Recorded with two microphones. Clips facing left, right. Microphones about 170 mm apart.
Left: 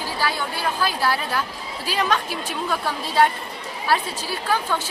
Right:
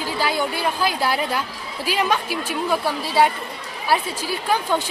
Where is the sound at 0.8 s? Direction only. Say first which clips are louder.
Right 1 dB; 15° right (ahead or behind).